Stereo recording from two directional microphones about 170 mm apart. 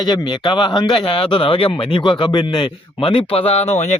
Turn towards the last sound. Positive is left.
turn(degrees=40)  # may be behind; listen again after turning